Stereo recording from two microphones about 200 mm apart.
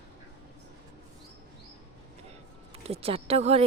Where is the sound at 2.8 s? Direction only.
30° right (ahead or behind).